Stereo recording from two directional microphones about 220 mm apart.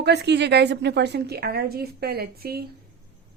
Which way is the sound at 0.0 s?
50° right (ahead or behind).